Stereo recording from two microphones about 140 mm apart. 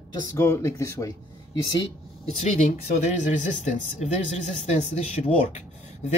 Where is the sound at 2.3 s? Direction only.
55° left (ahead or behind).